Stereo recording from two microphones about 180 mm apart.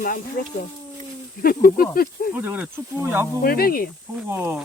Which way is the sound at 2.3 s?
10° right (ahead or behind).